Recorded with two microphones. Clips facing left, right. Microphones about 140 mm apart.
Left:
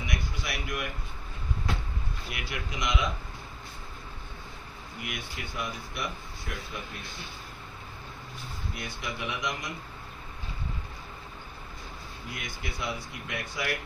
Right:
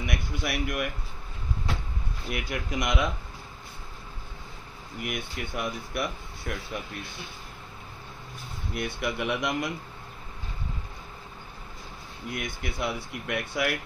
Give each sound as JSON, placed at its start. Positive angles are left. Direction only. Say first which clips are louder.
{"t": 0.0, "sound": "a sound", "louder": "right 4 dB", "side_deg": -55}
{"t": 2.3, "sound": "speech", "louder": "right 7 dB", "side_deg": -50}
{"t": 5.0, "sound": "speech", "louder": "right 5 dB", "side_deg": -55}
{"t": 8.7, "sound": "speech", "louder": "right 9 dB", "side_deg": -60}
{"t": 12.4, "sound": "speech", "louder": "right 5 dB", "side_deg": -55}